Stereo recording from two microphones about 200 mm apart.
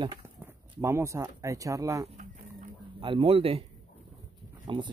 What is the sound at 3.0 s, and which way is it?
Speech, 25° right (ahead or behind).